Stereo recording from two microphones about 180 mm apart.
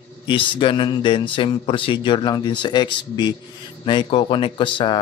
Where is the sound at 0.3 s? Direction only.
25° left (ahead or behind).